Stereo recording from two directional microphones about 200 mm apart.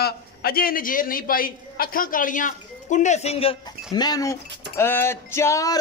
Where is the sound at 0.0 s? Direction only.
50° left (ahead or behind).